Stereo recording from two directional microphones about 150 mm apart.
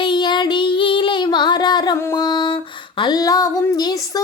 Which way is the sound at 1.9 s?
25° left (ahead or behind).